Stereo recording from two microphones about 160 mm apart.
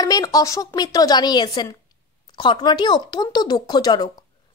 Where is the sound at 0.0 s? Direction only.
25° left (ahead or behind).